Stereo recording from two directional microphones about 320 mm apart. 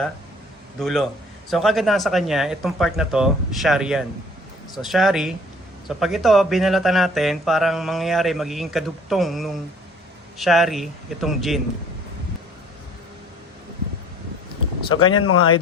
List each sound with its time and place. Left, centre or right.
0.8 s speech: centre
15.0 s speech: left